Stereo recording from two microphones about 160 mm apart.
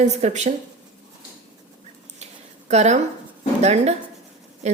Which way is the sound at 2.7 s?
45° right (ahead or behind).